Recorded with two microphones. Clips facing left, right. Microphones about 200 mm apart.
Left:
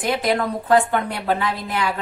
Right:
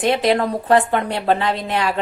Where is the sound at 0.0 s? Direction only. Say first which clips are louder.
Right 4 dB; 25° right (ahead or behind).